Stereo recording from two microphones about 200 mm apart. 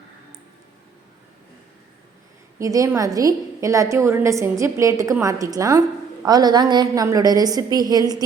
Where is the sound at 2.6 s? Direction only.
15° right (ahead or behind).